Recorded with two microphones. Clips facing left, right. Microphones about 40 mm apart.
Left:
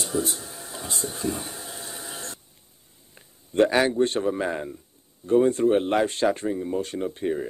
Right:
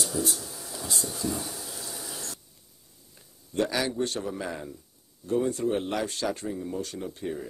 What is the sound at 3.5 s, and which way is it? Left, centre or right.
Speech, left.